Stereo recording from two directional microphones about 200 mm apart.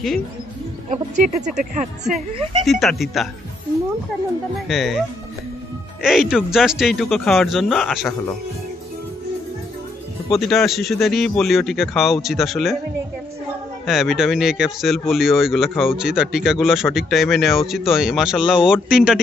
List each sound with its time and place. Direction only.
0.8 s speech: 35° right (ahead or behind)
2.6 s speech: centre (ahead or behind)
4.6 s speech: centre (ahead or behind)
6.0 s speech: centre (ahead or behind)
10.3 s speech: centre (ahead or behind)
13.8 s speech: centre (ahead or behind)